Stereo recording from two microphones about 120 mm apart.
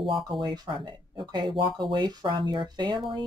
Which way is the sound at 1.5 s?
40° right (ahead or behind).